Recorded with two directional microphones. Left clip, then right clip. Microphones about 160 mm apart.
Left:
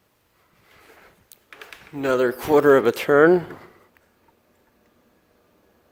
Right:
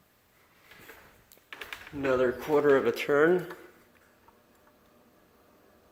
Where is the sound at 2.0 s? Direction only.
65° left (ahead or behind); by 3.4 s 45° left (ahead or behind).